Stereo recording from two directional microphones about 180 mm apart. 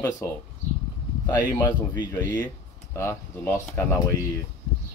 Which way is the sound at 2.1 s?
20° left (ahead or behind).